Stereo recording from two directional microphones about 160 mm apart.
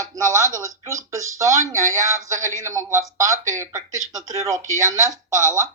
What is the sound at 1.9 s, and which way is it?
Speech, 50° right (ahead or behind).